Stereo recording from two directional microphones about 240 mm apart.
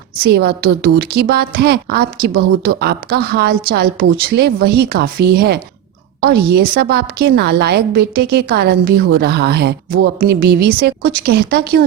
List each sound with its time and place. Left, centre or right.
0.2 s a woman's voice: right